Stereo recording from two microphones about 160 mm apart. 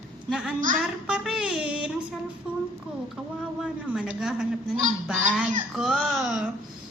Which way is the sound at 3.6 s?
5° right (ahead or behind).